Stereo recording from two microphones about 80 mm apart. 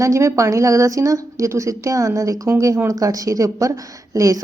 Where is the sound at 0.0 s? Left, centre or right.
Right.